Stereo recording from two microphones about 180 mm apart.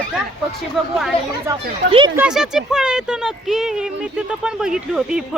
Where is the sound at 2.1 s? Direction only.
5° right (ahead or behind).